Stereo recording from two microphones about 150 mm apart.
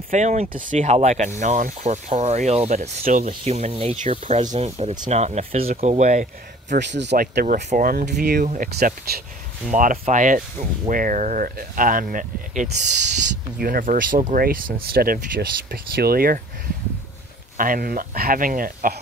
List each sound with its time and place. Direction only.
0.1 s speech: 55° right (ahead or behind)
3.0 s speech: 65° right (ahead or behind)
3.3 s speech: 45° right (ahead or behind)
6.7 s speech: 65° right (ahead or behind)
8.5 s speech: 65° right (ahead or behind); by 9.2 s 90° right
9.7 s speech: 60° right (ahead or behind)
13.6 s speech: 75° right (ahead or behind)
17.6 s speech: 70° right (ahead or behind)